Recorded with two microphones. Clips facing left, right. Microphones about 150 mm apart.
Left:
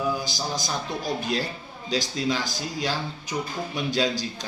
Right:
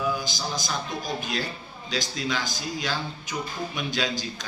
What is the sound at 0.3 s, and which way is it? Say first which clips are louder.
Speech: left 1 dB; 35° left (ahead or behind).